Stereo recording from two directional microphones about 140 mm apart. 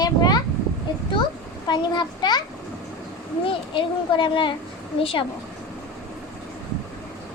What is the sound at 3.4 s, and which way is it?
Speech, 35° left (ahead or behind).